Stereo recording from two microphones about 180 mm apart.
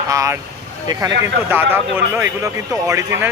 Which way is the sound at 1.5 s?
10° right (ahead or behind).